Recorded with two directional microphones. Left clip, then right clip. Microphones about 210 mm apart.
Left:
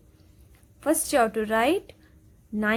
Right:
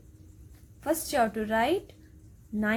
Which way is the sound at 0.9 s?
35° left (ahead or behind).